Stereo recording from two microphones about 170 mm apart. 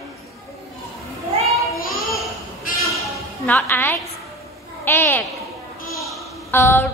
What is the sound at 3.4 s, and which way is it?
A woman's voice, 10° left (ahead or behind).